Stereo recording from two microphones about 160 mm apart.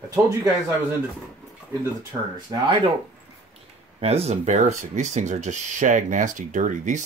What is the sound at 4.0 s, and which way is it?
Speech, 40° right (ahead or behind).